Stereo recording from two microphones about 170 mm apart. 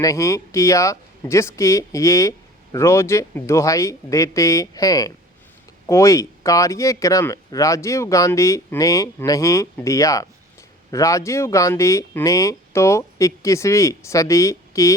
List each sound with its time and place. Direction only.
0.0 s speech: 20° left (ahead or behind)